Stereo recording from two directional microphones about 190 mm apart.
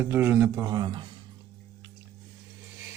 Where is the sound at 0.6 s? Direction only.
25° right (ahead or behind).